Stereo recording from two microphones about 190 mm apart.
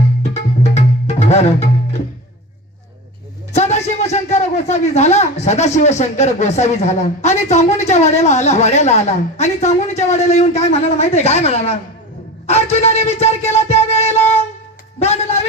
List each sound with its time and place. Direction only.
0.2 s music: 35° left (ahead or behind)
3.5 s a man's voice: 35° left (ahead or behind)
12.7 s music: 35° left (ahead or behind)
14.9 s speech: 35° left (ahead or behind)